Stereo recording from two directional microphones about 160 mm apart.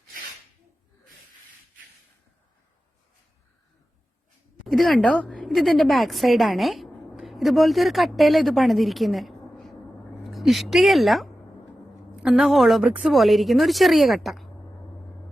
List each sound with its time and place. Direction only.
4.6 s a woman's voice: centre (ahead or behind)